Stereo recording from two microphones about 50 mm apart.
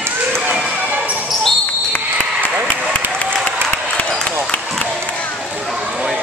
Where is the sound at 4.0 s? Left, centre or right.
Left.